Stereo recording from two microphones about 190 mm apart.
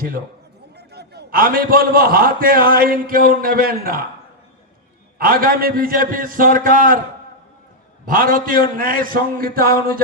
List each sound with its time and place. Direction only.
0.8 s a man's voice: 60° right (ahead or behind)
5.1 s a man's voice: 50° right (ahead or behind)
8.0 s a man's voice: 50° right (ahead or behind)